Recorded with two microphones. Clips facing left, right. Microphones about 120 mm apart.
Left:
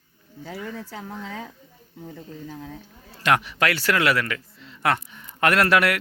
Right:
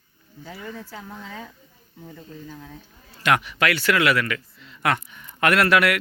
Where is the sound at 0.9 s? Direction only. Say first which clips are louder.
Left 3 dB; 85° left.